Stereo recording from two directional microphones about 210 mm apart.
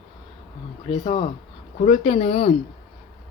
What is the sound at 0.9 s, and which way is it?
Speech, 25° left (ahead or behind).